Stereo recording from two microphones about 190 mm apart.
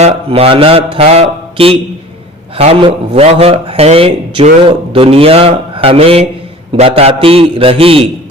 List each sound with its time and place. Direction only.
0.0 s a man's voice: 30° right (ahead or behind)